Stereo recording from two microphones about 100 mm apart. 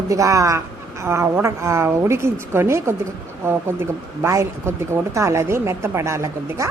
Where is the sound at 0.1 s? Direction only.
30° right (ahead or behind).